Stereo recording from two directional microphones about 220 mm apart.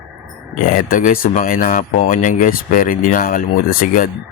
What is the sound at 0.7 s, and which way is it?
Speech, 35° left (ahead or behind).